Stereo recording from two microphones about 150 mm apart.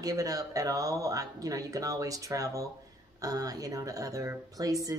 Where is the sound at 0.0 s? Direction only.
25° right (ahead or behind).